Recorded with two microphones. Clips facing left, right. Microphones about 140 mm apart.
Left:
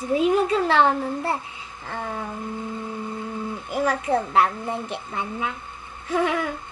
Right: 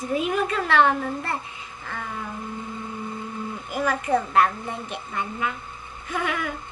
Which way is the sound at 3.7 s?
25° left (ahead or behind).